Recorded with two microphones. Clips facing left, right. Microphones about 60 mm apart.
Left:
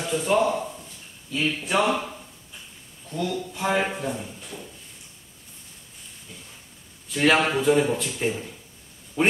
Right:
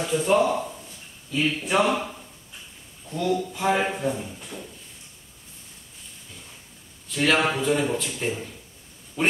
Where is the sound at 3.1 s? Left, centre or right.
Centre.